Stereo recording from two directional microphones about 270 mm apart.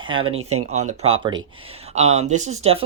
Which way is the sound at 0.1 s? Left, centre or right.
Centre.